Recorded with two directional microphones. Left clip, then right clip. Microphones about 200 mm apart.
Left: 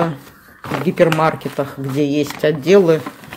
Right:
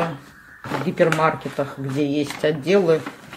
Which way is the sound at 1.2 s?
25° left (ahead or behind).